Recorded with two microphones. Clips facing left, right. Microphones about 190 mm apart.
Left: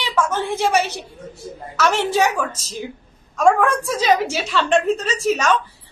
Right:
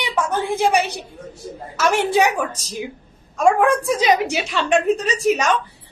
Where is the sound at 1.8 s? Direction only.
10° right (ahead or behind).